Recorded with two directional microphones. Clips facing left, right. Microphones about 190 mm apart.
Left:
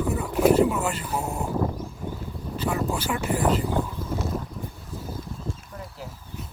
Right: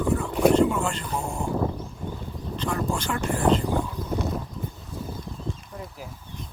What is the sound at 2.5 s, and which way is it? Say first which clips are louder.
Speech: left 1 dB; 5° left (ahead or behind).